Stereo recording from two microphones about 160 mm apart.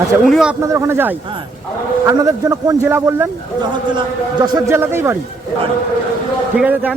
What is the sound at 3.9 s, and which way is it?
A man's voice, 25° right (ahead or behind).